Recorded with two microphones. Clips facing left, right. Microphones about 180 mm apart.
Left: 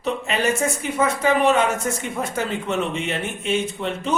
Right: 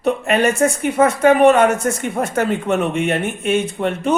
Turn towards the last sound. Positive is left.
turn(degrees=-60)  # may be behind; listen again after turning